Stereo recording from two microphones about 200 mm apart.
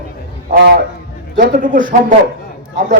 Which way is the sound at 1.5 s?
40° right (ahead or behind).